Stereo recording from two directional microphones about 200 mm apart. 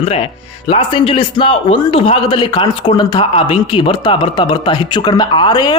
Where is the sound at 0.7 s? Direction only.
25° left (ahead or behind).